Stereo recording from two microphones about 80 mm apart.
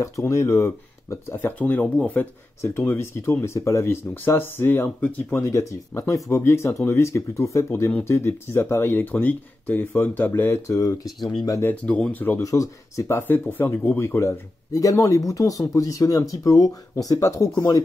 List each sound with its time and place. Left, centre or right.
0.0 s speech: left
1.3 s speech: left
5.4 s speech: left
11.7 s speech: centre
12.4 s speech: left
13.3 s speech: left
14.7 s speech: left